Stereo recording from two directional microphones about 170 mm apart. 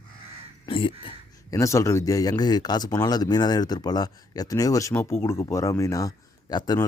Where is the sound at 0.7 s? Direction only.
30° left (ahead or behind).